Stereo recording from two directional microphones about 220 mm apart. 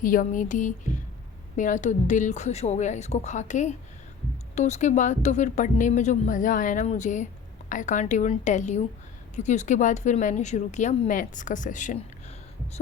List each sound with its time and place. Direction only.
0.0 s speech: 40° left (ahead or behind)